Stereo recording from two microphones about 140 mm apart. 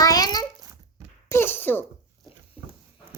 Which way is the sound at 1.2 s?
15° left (ahead or behind).